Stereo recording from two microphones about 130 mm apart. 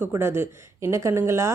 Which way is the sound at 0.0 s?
20° right (ahead or behind).